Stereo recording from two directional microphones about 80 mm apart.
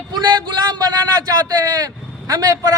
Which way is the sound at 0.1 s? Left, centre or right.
Right.